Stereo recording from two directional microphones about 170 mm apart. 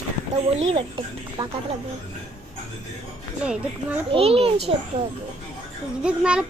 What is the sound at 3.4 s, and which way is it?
Speech, 5° right (ahead or behind).